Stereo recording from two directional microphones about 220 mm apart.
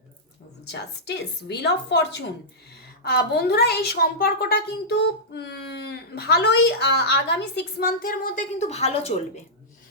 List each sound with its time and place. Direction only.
0.7 s a woman's voice: 50° left (ahead or behind); by 9.4 s 30° left (ahead or behind)